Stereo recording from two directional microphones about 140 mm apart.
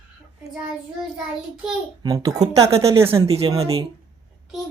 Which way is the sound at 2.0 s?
25° right (ahead or behind).